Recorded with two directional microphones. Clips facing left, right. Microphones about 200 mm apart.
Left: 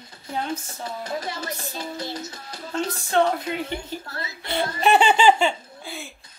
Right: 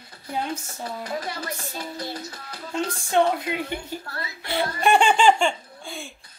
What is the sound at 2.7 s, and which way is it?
A woman's voice, 10° right (ahead or behind).